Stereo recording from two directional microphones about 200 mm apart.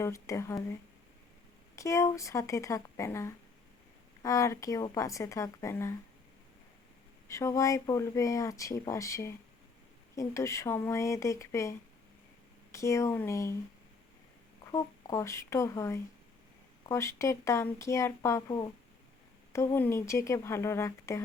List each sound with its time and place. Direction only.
0.0 s speech: 15° left (ahead or behind)
1.7 s speech: 15° left (ahead or behind)
7.3 s speech: 15° left (ahead or behind)
12.7 s speech: 15° left (ahead or behind)
14.7 s speech: 15° left (ahead or behind)